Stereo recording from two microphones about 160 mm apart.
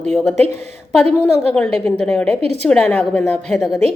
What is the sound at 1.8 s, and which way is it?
A woman's voice, 5° left (ahead or behind).